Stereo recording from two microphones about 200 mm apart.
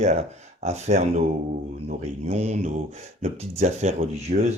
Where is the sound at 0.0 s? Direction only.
35° right (ahead or behind).